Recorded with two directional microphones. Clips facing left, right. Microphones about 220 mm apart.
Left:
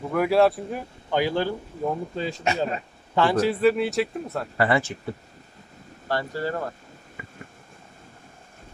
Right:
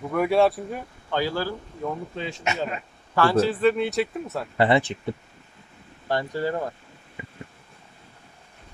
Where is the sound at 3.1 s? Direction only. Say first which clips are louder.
Right 1 dB; 20° left (ahead or behind); by 4.5 s centre (ahead or behind).